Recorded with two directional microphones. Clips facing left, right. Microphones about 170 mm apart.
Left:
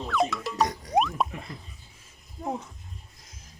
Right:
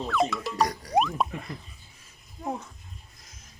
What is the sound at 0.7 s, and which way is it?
Music, 20° left (ahead or behind).